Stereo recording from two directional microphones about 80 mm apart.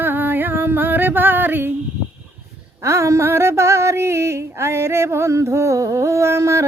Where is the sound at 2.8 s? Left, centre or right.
Right.